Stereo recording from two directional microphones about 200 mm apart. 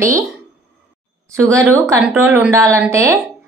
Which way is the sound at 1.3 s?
10° right (ahead or behind).